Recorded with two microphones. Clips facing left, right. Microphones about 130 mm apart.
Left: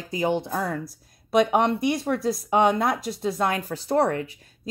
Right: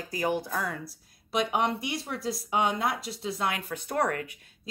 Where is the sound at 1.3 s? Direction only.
50° left (ahead or behind); by 4.3 s 30° left (ahead or behind).